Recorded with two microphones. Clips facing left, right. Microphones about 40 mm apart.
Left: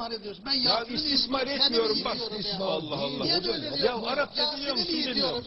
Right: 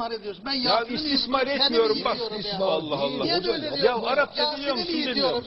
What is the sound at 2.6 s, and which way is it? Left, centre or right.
A man's voice, centre.